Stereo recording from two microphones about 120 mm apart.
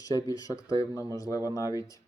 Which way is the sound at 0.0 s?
30° left (ahead or behind).